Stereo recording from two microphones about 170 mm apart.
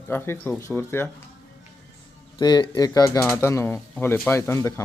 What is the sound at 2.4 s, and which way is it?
A man's voice, 25° left (ahead or behind).